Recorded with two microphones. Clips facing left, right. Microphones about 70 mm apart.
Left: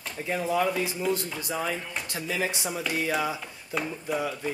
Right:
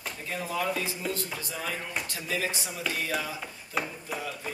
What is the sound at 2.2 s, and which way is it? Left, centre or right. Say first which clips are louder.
Speech: left 3 dB; centre.